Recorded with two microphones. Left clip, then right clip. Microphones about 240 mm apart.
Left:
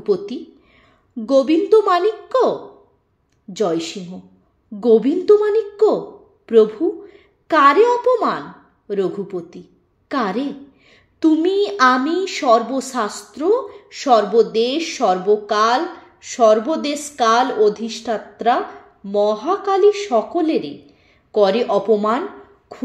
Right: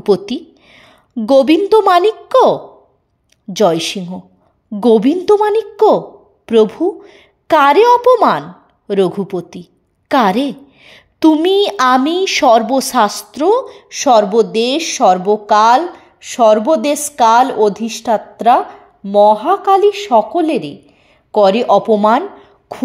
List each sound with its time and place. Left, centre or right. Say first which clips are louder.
0.0 s a woman's voice: right 6 dB; right
3.5 s a woman's voice: right 8 dB; right